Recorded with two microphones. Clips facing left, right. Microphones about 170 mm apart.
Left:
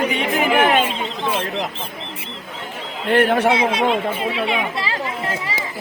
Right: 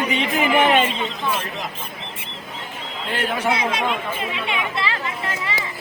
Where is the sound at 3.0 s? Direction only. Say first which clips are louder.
Left 9 dB; 60° left (ahead or behind).